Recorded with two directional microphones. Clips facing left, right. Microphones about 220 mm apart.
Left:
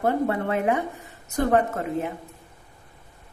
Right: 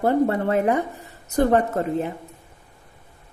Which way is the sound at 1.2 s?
35° right (ahead or behind).